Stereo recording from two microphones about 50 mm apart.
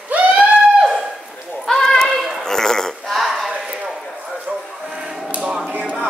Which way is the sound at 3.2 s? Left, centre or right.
Centre.